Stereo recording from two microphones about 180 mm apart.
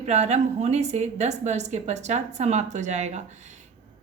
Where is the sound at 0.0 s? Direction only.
40° right (ahead or behind).